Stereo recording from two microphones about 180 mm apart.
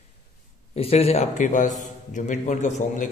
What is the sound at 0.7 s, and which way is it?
A man's voice, 35° left (ahead or behind).